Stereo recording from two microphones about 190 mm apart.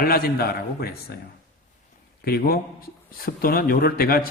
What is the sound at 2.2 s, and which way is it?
A man's voice, 55° left (ahead or behind).